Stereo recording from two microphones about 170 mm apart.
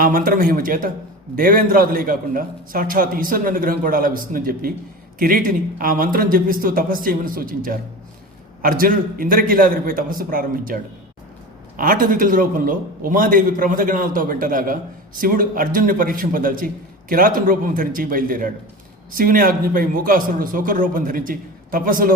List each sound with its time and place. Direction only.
0.0 s a man's voice: 55° right (ahead or behind)
11.8 s a man's voice: 55° right (ahead or behind)